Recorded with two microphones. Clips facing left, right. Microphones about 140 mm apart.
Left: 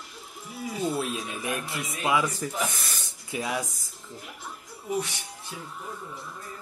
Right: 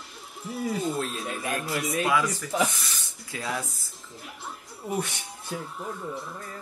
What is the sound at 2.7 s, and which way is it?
Snake, 50° left (ahead or behind).